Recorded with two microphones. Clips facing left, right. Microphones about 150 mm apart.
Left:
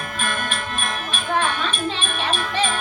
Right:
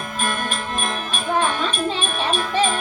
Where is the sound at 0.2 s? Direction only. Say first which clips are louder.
Right 2 dB; 40° right (ahead or behind).